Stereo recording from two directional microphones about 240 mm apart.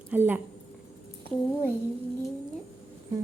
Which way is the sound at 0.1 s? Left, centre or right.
Centre.